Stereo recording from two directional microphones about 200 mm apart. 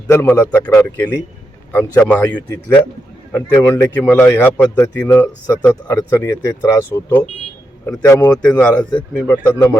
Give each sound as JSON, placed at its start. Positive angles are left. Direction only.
{"t": 0.1, "sound": "a man's voice", "side_deg": 10}
{"t": 8.4, "sound": "a man's voice", "side_deg": 5}